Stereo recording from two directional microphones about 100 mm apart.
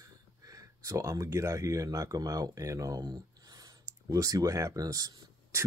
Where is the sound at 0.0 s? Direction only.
35° right (ahead or behind).